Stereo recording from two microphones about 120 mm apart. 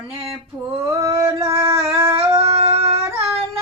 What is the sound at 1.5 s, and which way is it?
Singing, 20° right (ahead or behind).